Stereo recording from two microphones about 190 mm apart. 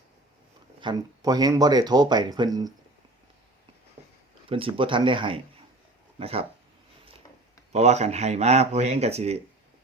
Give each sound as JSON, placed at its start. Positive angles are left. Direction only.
{"t": 0.8, "sound": "speech", "side_deg": -20}
{"t": 4.0, "sound": "a sound", "side_deg": -30}
{"t": 4.4, "sound": "speech", "side_deg": -30}
{"t": 7.7, "sound": "speech", "side_deg": -35}